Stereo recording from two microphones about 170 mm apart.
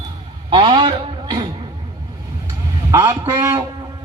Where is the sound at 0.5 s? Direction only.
30° right (ahead or behind).